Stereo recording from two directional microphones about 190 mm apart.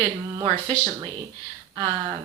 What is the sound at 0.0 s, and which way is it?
Speech, 30° right (ahead or behind).